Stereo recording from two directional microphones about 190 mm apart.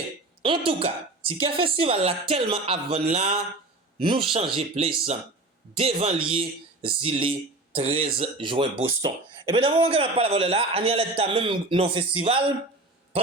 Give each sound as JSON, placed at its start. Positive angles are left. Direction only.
{"t": 0.4, "sound": "speech", "side_deg": -25}